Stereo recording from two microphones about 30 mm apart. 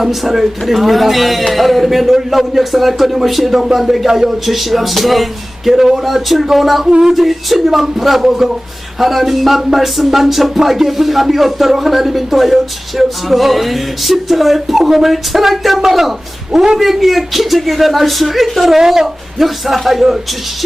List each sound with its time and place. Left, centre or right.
0.0 s a woman's voice: centre
4.4 s a woman's voice: centre
18.8 s a woman's voice: centre